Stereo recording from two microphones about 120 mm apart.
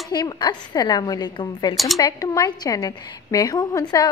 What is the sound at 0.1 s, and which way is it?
A woman's voice, 35° left (ahead or behind).